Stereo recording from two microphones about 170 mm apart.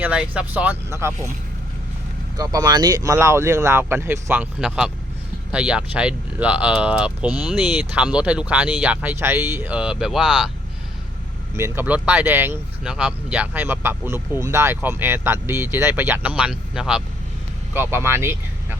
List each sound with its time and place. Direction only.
0.0 s speech: 5° right (ahead or behind)
2.4 s speech: 25° right (ahead or behind); by 10.5 s centre (ahead or behind)
11.5 s speech: 15° right (ahead or behind)
17.7 s speech: 15° right (ahead or behind)